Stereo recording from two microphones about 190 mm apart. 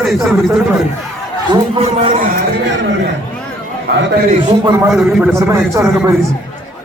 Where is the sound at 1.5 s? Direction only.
30° right (ahead or behind).